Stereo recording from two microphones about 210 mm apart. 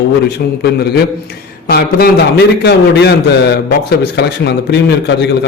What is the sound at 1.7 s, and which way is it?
A man's voice, 50° left (ahead or behind).